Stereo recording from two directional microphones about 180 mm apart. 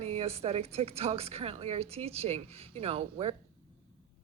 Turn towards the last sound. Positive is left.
turn(degrees=-35)  # may be behind; listen again after turning